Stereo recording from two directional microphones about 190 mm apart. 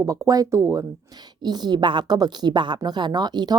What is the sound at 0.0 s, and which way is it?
Speech, 15° right (ahead or behind).